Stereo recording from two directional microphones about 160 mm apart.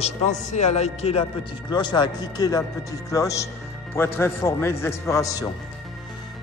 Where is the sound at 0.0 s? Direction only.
45° left (ahead or behind).